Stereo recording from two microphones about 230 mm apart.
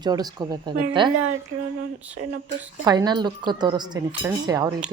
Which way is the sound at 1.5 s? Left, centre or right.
Right.